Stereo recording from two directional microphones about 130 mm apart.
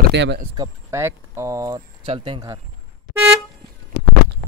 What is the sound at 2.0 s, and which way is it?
Speech, 45° right (ahead or behind).